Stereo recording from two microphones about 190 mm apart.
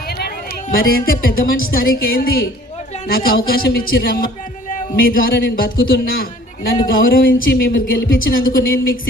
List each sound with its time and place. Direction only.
0.1 s a woman's voice: 55° left (ahead or behind)